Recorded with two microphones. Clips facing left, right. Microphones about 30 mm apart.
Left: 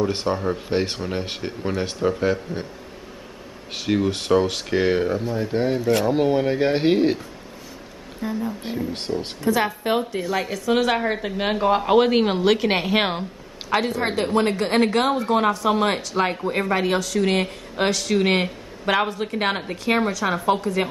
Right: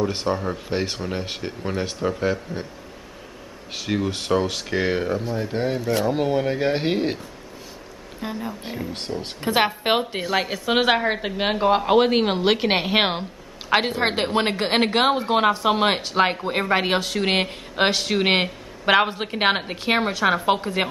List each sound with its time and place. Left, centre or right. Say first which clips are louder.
0.0 s speech: left 1 dB; centre
3.7 s speech: left 3 dB; centre
8.2 s a woman's voice: left 3 dB; right
8.9 s speech: left 3 dB; centre
9.4 s a woman's voice: right 2 dB; right
10.5 s a woman's voice: even; right
11.1 s a woman's voice: even; centre